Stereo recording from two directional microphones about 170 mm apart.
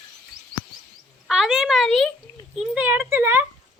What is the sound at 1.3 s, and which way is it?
Speech, 5° right (ahead or behind).